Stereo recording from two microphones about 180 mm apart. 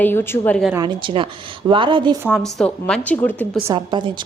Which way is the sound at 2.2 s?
Centre (ahead or behind).